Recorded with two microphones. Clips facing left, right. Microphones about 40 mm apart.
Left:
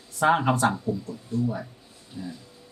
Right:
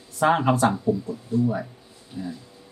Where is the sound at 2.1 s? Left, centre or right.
Centre.